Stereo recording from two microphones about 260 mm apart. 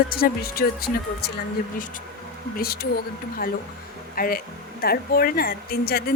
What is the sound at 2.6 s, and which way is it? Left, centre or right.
A woman's voice, left.